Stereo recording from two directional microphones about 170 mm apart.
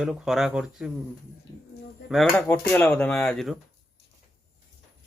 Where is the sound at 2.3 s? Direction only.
10° left (ahead or behind).